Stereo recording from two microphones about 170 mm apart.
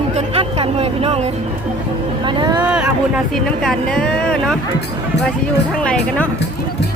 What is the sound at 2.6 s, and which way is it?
Speech, 5° right (ahead or behind).